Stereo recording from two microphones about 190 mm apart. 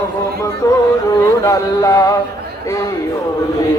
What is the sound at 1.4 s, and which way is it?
Speech, 15° left (ahead or behind).